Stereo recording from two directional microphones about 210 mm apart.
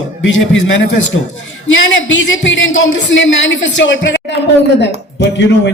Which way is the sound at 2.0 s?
65° left (ahead or behind).